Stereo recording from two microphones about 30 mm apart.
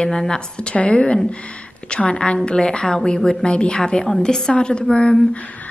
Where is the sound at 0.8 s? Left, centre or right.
Left.